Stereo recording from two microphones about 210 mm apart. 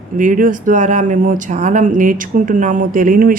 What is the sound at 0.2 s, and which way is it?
Speech, 40° right (ahead or behind).